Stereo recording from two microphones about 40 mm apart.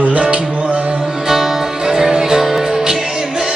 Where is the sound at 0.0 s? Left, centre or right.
Right.